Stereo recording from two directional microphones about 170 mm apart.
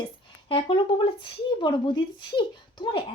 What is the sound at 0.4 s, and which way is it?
Speech, 30° left (ahead or behind).